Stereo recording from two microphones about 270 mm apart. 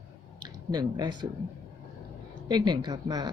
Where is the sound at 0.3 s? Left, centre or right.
Centre.